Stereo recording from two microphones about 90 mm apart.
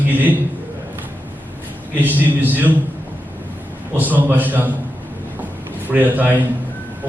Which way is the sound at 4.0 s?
20° right (ahead or behind).